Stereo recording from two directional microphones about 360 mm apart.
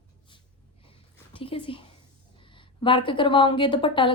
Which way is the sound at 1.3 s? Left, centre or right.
Centre.